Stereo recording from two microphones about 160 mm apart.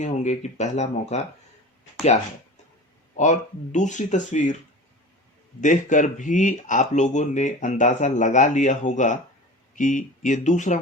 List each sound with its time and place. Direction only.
0.0 s speech: 45° left (ahead or behind)
3.2 s speech: 50° left (ahead or behind)
5.5 s speech: 50° left (ahead or behind)